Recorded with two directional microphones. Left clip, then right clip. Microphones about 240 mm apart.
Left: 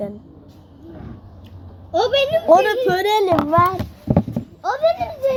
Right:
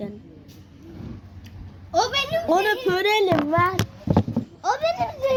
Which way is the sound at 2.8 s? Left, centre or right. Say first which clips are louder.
Left 3 dB; centre.